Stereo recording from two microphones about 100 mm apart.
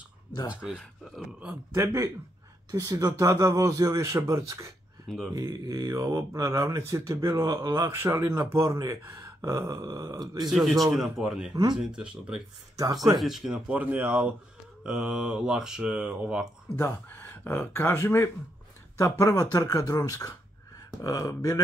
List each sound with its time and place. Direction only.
0.5 s speech: 10° right (ahead or behind)
1.7 s a man's voice: 30° right (ahead or behind)
5.0 s speech: centre (ahead or behind)
5.3 s speech: 35° right (ahead or behind)
10.5 s a man's voice: centre (ahead or behind)
12.7 s speech: 35° right (ahead or behind)
13.2 s speech: 5° right (ahead or behind)
16.7 s speech: 20° left (ahead or behind)